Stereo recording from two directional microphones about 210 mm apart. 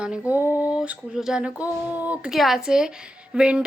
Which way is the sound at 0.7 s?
5° right (ahead or behind).